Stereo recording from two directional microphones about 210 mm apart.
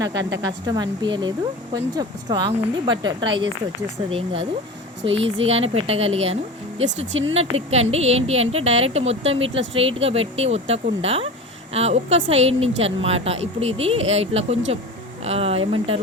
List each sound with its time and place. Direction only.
0.1 s speech: 55° right (ahead or behind)
0.7 s a woman's voice: 20° right (ahead or behind)
5.0 s speech: 60° right (ahead or behind)
5.5 s a woman's voice: 30° right (ahead or behind)
7.1 s speech: 65° right (ahead or behind)
7.3 s a woman's voice: 30° right (ahead or behind)